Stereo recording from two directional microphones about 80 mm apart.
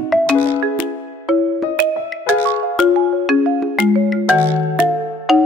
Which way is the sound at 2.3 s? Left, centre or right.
Left.